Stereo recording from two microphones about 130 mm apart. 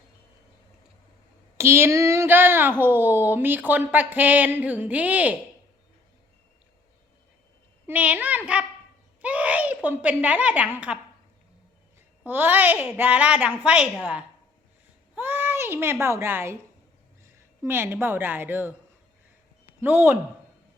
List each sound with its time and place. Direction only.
1.5 s speech: 20° right (ahead or behind)
7.9 s a child's voice: 10° right (ahead or behind)
12.2 s a child's voice: 15° right (ahead or behind)
19.8 s a child's voice: 15° right (ahead or behind)